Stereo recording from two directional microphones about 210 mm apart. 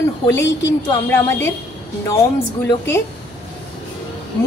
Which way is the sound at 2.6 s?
10° left (ahead or behind).